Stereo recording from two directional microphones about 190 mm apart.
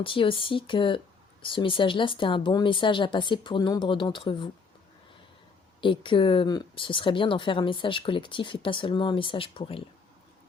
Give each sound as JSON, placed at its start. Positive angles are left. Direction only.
{"t": 0.0, "sound": "speech", "side_deg": 25}
{"t": 5.8, "sound": "speech", "side_deg": 25}